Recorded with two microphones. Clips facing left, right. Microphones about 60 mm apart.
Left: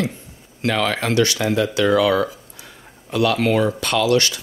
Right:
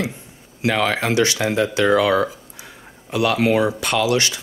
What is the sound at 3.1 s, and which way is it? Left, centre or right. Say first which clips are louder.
Speech: even; centre.